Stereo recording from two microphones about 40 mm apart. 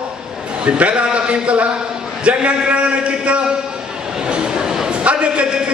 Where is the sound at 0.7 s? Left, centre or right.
Right.